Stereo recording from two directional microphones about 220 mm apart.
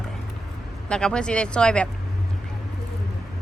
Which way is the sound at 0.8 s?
5° left (ahead or behind).